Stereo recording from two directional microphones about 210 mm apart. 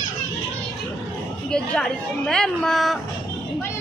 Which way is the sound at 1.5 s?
5° left (ahead or behind).